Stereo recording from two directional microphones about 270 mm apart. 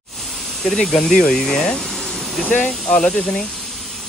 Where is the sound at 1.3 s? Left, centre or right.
Centre.